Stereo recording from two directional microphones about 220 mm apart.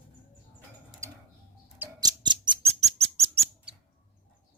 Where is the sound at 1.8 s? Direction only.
15° right (ahead or behind).